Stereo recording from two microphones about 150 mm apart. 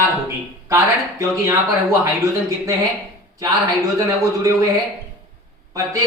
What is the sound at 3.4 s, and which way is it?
Speech, 20° right (ahead or behind).